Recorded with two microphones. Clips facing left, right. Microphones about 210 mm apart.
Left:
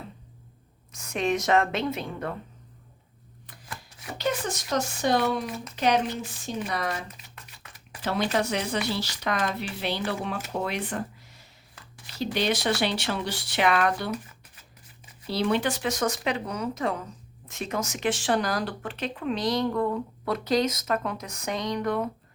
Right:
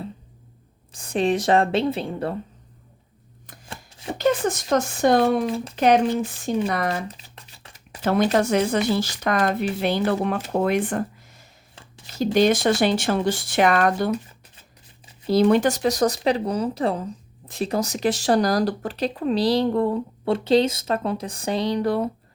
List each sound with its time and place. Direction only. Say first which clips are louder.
0.9 s speech: right 5 dB; 30° right (ahead or behind)
3.7 s chopping: right 5 dB; 25° right (ahead or behind)
4.2 s speech: right 8 dB; 50° right (ahead or behind)
6.7 s speech: right 6 dB; 65° right (ahead or behind)
7.2 s shuffling cards: right 2 dB; 30° right (ahead or behind)
8.0 s speech: right 7 dB; 50° right (ahead or behind)
11.7 s a sound: right 3 dB; 25° right (ahead or behind)
12.1 s speech: right 8 dB; 45° right (ahead or behind)
14.1 s a sound: right 7 dB; 30° right (ahead or behind)
15.3 s speech: right 8 dB; 45° right (ahead or behind)